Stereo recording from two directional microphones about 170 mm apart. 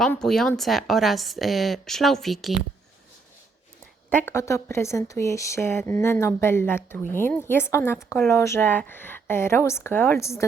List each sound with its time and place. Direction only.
0.0 s a woman's voice: 5° left (ahead or behind)
4.1 s speech: 10° left (ahead or behind)